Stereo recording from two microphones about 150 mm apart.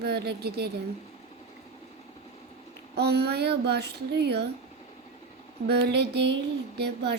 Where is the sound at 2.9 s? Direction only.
90° right.